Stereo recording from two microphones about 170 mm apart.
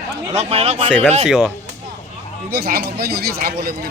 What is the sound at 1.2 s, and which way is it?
Speech, centre (ahead or behind).